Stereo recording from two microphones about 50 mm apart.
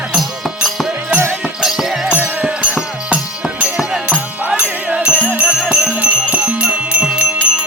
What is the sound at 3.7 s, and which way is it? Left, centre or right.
Music, centre.